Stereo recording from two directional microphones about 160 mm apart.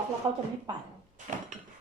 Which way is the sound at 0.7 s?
25° right (ahead or behind).